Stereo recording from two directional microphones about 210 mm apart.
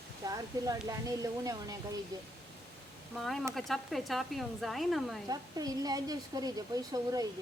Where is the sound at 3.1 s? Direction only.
Centre (ahead or behind).